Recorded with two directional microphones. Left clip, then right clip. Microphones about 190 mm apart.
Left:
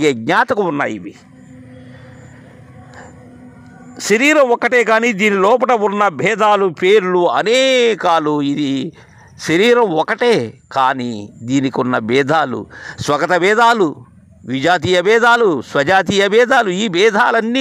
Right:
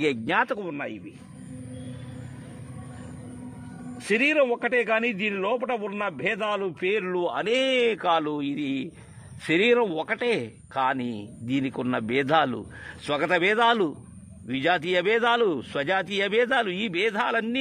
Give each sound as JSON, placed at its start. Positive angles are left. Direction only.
{"t": 0.0, "sound": "speech", "side_deg": 30}
{"t": 0.6, "sound": "speech", "side_deg": 50}
{"t": 4.0, "sound": "speech", "side_deg": 45}